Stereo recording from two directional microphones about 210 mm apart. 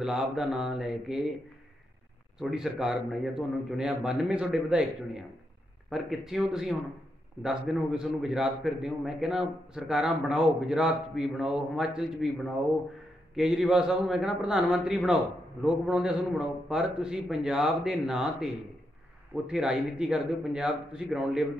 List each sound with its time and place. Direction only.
0.0 s a man's voice: centre (ahead or behind)
2.5 s a man's voice: centre (ahead or behind)